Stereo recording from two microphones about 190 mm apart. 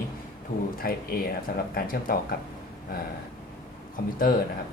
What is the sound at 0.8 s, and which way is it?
Speech, 50° left (ahead or behind).